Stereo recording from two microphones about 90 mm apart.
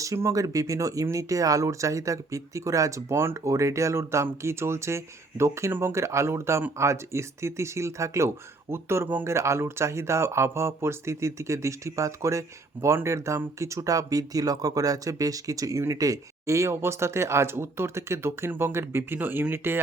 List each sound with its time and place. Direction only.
0.0 s speech: 35° right (ahead or behind)